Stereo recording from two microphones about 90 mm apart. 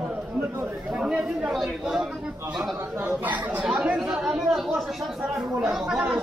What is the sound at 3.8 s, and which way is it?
Speech, 5° right (ahead or behind).